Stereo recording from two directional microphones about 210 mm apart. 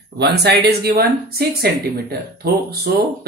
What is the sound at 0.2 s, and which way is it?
Speech, 50° right (ahead or behind).